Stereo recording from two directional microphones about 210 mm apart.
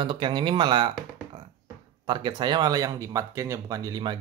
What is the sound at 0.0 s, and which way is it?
Speech, 20° right (ahead or behind).